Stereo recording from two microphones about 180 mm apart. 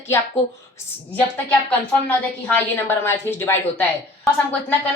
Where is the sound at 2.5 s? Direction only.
10° left (ahead or behind).